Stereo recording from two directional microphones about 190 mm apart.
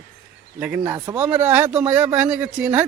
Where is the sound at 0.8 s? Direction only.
20° right (ahead or behind).